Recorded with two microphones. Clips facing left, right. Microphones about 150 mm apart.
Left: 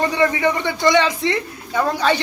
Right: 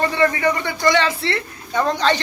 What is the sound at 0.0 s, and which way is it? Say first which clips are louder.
Speech: even; 15° left (ahead or behind).